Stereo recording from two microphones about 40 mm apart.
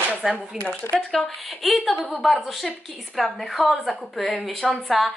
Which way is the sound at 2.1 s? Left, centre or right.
Centre.